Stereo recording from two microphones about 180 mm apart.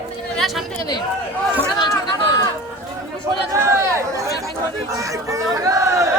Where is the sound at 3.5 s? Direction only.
15° right (ahead or behind).